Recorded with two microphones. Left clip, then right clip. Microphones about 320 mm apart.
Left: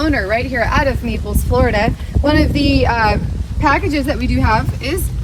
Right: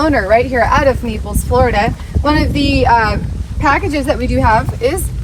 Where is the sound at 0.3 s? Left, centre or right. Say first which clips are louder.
Right 5 dB; centre.